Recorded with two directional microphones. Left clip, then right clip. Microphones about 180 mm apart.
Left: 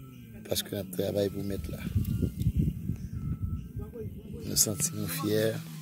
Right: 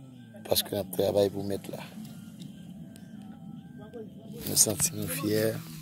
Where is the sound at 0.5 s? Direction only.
15° left (ahead or behind).